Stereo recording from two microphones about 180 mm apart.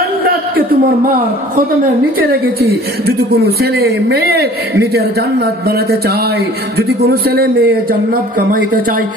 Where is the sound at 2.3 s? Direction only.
60° right (ahead or behind).